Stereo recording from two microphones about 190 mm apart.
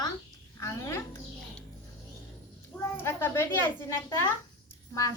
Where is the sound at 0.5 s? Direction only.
15° left (ahead or behind).